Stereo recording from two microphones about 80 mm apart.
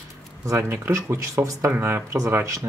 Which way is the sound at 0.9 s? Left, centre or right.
Right.